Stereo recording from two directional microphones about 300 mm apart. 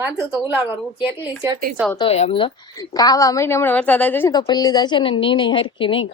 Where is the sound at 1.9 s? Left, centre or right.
Centre.